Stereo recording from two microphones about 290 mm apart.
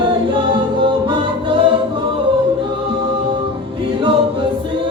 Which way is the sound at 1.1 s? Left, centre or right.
Centre.